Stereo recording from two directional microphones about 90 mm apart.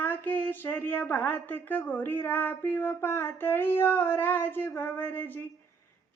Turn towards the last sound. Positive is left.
turn(degrees=20)  # may be behind; listen again after turning